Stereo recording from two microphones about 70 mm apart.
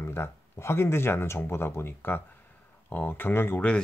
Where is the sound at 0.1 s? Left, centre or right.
Left.